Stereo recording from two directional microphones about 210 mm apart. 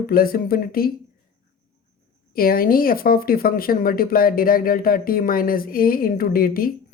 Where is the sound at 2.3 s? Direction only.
45° left (ahead or behind).